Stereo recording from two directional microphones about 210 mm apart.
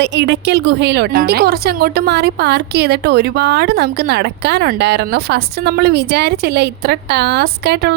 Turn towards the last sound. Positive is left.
turn(degrees=-50)  # may be behind; listen again after turning